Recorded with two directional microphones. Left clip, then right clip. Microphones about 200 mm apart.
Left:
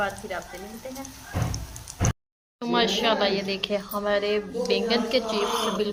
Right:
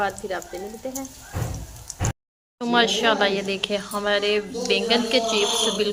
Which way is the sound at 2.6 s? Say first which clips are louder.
Right 4 dB; centre (ahead or behind).